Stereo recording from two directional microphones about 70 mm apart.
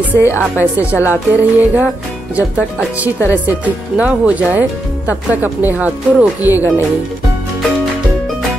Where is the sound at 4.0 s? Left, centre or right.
Right.